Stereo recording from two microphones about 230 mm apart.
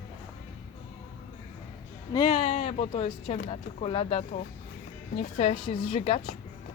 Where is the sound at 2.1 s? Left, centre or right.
Centre.